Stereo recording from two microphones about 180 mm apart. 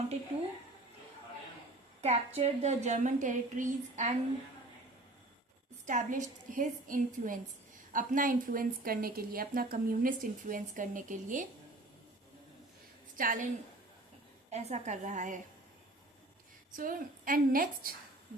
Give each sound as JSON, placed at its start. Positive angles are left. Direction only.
{"t": 2.0, "sound": "a woman's voice", "side_deg": -35}
{"t": 5.8, "sound": "a woman's voice", "side_deg": -45}
{"t": 13.1, "sound": "a woman's voice", "side_deg": -50}
{"t": 14.5, "sound": "a woman's voice", "side_deg": -40}
{"t": 16.7, "sound": "a woman's voice", "side_deg": -50}